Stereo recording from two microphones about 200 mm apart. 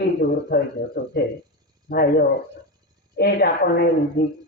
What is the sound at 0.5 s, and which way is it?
Speech, 50° left (ahead or behind).